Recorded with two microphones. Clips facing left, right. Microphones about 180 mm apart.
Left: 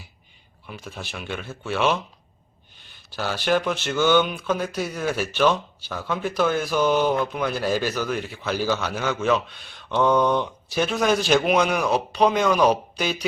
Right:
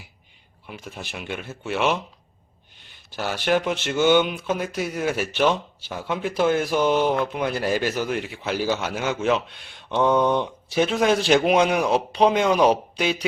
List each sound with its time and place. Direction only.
0.7 s speech: 15° right (ahead or behind)
3.2 s speech: 20° right (ahead or behind)